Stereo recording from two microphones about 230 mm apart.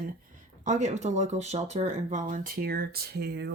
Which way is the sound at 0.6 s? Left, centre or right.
Right.